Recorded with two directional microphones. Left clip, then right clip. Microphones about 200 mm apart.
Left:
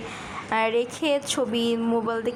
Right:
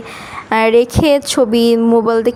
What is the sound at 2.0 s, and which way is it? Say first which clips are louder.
Music: right 13 dB; 70° right (ahead or behind).